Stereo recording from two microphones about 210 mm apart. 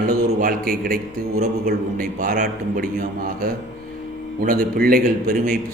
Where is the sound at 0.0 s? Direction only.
45° right (ahead or behind).